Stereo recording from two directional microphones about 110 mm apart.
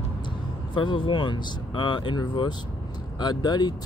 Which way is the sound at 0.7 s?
45° left (ahead or behind).